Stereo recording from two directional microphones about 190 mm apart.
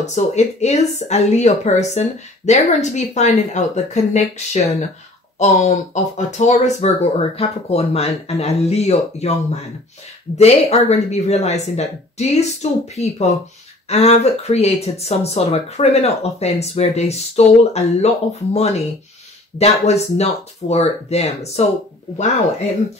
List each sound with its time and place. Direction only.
0.0 s speech: 35° left (ahead or behind)
5.4 s speech: 35° left (ahead or behind)